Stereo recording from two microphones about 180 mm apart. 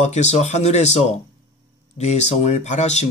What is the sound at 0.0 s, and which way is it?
Speech, 40° left (ahead or behind).